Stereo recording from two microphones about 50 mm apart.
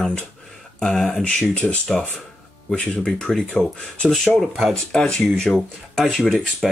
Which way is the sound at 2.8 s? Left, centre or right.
Centre.